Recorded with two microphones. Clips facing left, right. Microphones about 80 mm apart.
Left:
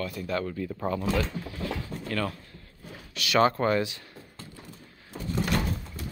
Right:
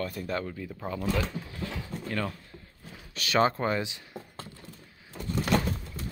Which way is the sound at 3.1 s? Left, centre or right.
Right.